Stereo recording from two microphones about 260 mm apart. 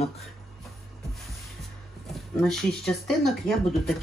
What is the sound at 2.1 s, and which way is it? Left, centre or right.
Speech, centre.